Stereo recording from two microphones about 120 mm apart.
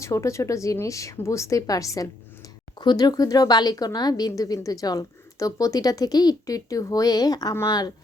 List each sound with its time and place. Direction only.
0.0 s speech: 25° left (ahead or behind)